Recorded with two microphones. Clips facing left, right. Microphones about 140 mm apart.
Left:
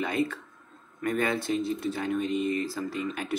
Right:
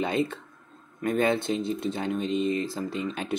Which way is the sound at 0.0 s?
25° right (ahead or behind).